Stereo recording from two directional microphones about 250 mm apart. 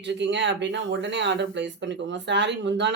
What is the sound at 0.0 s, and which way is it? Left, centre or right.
Speech, right.